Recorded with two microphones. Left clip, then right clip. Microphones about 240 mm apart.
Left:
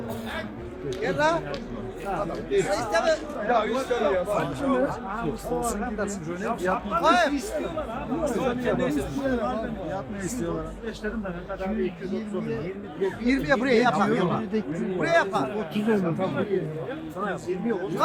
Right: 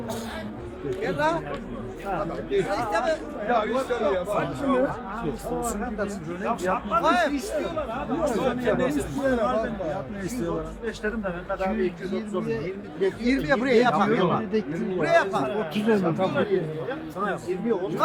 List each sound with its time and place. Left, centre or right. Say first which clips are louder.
1.0 s a man's voice: left 2 dB; centre
7.3 s a man's voice: right 1 dB; centre
9.2 s speech: right 6 dB; centre
11.6 s speech: right 2 dB; centre
13.2 s a man's voice: left 1 dB; centre
13.9 s speech: right 2 dB; centre
14.8 s a man's voice: right 1 dB; centre
15.5 s speech: right 2 dB; centre
16.2 s speech: right 3 dB; right
17.2 s a man's voice: right 2 dB; centre